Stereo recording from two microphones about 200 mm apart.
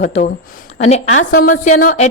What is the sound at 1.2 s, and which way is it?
Speech, 45° left (ahead or behind).